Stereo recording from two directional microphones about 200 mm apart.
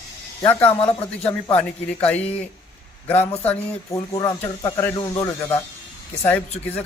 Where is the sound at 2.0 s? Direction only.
5° left (ahead or behind).